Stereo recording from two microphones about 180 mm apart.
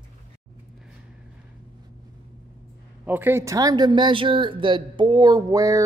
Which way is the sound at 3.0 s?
10° right (ahead or behind).